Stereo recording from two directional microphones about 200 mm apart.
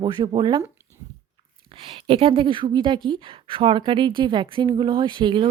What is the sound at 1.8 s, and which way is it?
Speech, 30° right (ahead or behind).